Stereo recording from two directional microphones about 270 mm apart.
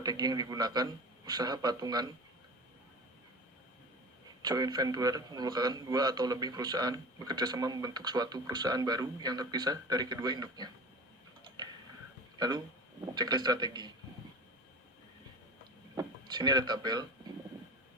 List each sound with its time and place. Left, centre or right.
0.0 s a man's voice: centre
4.4 s a man's voice: centre
11.4 s tick-tock: centre
12.4 s a man's voice: centre
16.0 s speech: centre